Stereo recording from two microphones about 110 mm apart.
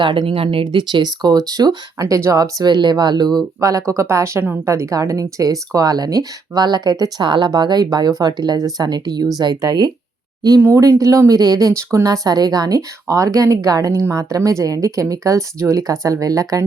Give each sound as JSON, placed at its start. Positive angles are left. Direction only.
{"t": 0.0, "sound": "a woman's voice", "side_deg": -50}
{"t": 3.6, "sound": "a woman's voice", "side_deg": -30}
{"t": 11.0, "sound": "a woman's voice", "side_deg": -30}